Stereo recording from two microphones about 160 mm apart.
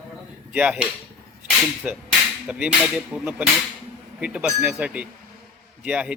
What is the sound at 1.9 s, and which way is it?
Speech, 10° right (ahead or behind).